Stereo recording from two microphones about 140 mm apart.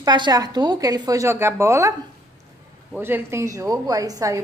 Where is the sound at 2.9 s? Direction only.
15° right (ahead or behind).